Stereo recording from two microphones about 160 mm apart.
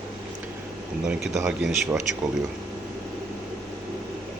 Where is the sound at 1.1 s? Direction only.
5° right (ahead or behind).